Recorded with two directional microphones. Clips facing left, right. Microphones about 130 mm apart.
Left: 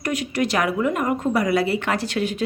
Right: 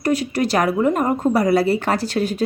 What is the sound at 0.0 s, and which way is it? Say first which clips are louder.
Speech: right 4 dB; 35° right (ahead or behind).